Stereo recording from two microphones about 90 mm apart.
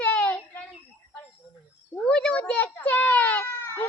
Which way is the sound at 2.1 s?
10° left (ahead or behind).